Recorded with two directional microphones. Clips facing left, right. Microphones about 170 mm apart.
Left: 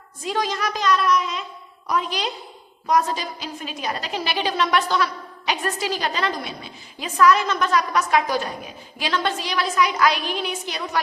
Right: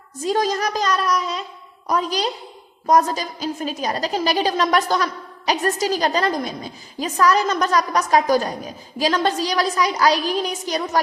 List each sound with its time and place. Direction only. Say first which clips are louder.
0.2 s a woman's voice: right 4 dB; 40° right (ahead or behind)